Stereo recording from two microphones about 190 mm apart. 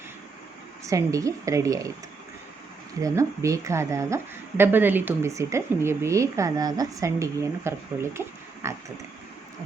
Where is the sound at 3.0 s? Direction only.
15° right (ahead or behind).